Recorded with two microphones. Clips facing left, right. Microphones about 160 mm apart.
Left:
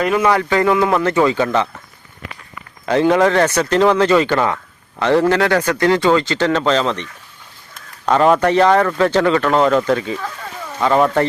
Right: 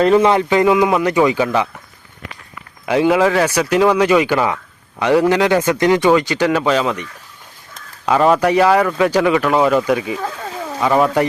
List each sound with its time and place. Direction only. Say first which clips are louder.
0.0 s speech: right 4 dB; 30° right (ahead or behind); by 1.6 s 15° right (ahead or behind)
2.8 s speech: even; 10° right (ahead or behind)